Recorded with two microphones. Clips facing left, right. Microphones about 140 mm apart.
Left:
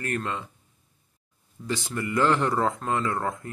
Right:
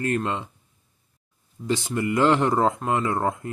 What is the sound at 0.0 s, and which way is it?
Speech, 20° right (ahead or behind).